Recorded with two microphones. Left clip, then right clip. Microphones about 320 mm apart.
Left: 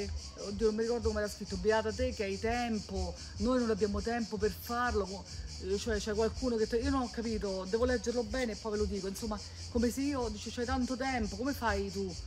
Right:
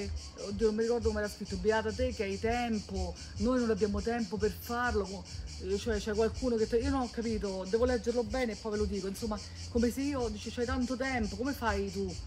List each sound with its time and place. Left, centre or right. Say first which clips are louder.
0.0 s speech: even; centre